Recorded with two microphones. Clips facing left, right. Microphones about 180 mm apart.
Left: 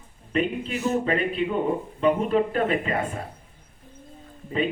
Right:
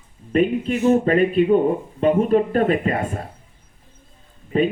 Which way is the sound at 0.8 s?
40° right (ahead or behind).